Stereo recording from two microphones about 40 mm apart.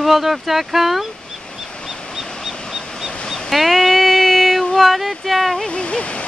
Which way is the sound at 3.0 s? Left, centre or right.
Centre.